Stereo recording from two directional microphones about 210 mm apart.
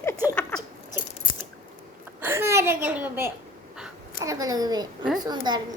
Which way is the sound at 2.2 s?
10° right (ahead or behind).